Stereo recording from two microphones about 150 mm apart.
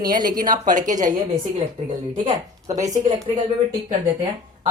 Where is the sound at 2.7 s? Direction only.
20° right (ahead or behind).